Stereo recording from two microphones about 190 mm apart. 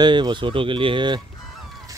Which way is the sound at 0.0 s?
25° right (ahead or behind).